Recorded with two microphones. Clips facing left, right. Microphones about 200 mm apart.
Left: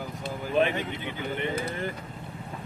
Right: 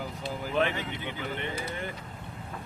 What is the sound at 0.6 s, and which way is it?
Speech, 15° left (ahead or behind).